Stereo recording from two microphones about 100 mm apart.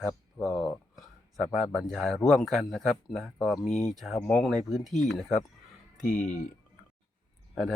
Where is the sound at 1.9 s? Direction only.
5° left (ahead or behind).